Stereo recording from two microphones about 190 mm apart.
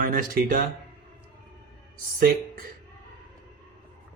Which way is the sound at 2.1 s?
50° right (ahead or behind).